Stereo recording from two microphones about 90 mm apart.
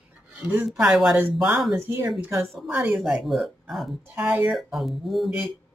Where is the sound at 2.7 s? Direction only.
20° right (ahead or behind).